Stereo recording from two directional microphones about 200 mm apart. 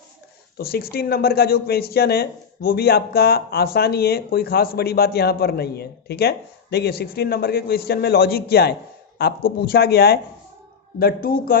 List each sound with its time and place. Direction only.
0.5 s a man's voice: 50° left (ahead or behind)